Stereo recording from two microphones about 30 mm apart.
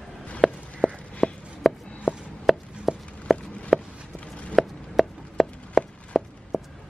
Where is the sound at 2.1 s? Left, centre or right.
Right.